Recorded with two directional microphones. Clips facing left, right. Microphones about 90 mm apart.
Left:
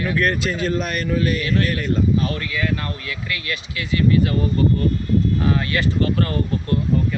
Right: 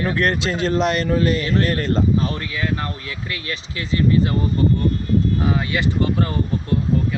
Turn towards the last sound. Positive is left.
turn(degrees=-15)  # may be behind; listen again after turning